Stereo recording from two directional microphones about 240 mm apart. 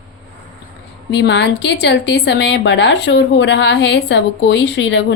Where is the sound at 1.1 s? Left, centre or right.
Left.